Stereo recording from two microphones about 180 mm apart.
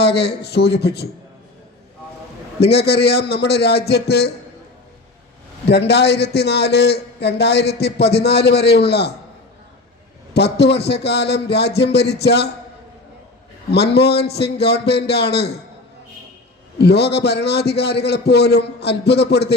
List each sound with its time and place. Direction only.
0.0 s a man's voice: 65° left (ahead or behind)
2.6 s a man's voice: 65° left (ahead or behind)
5.6 s a man's voice: 70° left (ahead or behind)
10.3 s a man's voice: 65° left (ahead or behind)
13.7 s a man's voice: 65° left (ahead or behind)
16.7 s a man's voice: 65° left (ahead or behind)